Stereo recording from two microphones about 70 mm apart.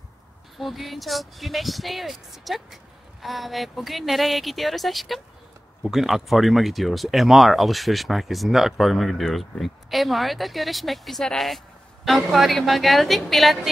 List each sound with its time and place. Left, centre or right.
0.6 s speech: centre